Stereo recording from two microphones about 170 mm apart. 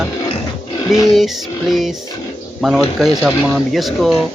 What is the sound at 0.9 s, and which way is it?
Speech, centre (ahead or behind).